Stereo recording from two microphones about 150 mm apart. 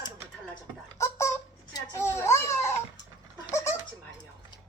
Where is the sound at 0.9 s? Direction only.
20° left (ahead or behind).